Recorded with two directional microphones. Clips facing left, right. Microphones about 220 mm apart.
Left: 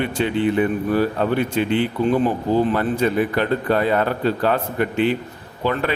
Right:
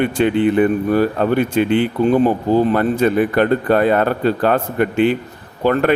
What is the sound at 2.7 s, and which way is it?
A man's voice, 55° right (ahead or behind).